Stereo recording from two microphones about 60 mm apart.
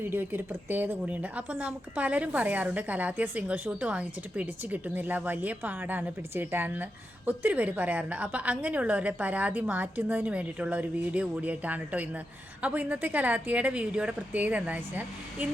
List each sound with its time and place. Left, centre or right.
0.0 s a woman's voice: right